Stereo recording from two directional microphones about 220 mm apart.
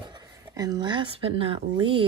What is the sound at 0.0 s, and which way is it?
Speech, 20° right (ahead or behind).